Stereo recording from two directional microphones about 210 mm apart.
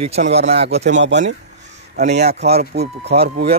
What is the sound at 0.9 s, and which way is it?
Speech, 60° right (ahead or behind).